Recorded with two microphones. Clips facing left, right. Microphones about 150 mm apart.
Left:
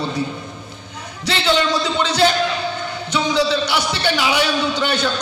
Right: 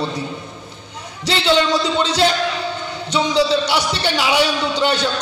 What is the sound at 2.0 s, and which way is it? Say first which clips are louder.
A man's voice: left 3 dB; 30° right (ahead or behind).